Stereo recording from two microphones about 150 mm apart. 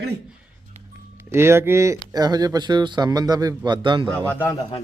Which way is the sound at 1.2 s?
15° right (ahead or behind).